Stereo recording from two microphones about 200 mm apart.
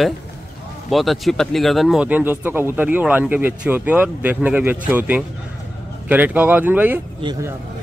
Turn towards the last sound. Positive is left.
turn(degrees=-10)  # may be behind; listen again after turning